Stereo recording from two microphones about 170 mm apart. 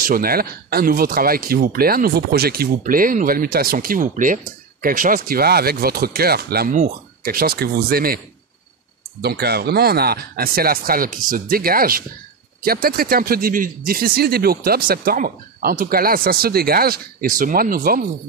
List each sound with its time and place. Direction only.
0.0 s speech: 60° right (ahead or behind)
9.2 s speech: 70° right (ahead or behind)